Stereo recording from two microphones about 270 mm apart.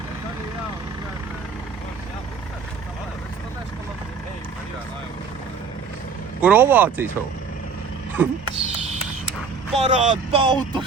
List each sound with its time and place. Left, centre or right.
6.4 s speech: centre
8.5 s a sound: right
9.7 s speech: right